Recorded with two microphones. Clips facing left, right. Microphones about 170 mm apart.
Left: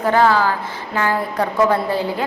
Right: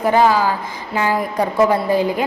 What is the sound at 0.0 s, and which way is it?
A woman's voice, 15° right (ahead or behind).